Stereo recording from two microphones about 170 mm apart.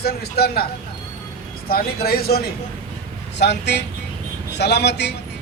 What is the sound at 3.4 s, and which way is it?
A man's voice, 80° left.